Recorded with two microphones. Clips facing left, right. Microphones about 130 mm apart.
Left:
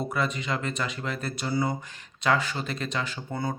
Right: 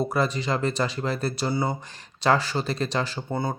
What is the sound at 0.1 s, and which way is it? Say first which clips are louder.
Speech: right 4 dB; 35° right (ahead or behind).